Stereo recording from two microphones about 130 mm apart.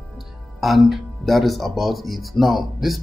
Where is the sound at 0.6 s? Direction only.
Centre (ahead or behind).